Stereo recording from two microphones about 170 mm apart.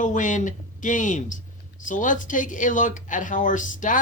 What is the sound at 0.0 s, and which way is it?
Speech, 50° left (ahead or behind).